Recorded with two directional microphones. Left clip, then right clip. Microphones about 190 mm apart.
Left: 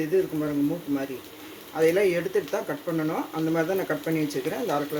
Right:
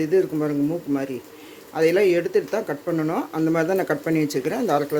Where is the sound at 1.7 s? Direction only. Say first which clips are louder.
Right 4 dB; 45° right (ahead or behind).